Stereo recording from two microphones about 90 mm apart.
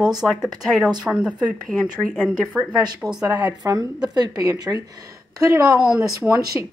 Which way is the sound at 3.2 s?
40° right (ahead or behind).